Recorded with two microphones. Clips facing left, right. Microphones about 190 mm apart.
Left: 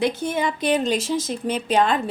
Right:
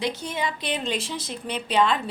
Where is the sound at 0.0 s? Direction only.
55° left (ahead or behind).